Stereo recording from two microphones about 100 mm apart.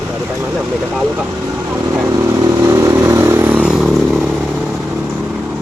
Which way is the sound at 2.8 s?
30° right (ahead or behind).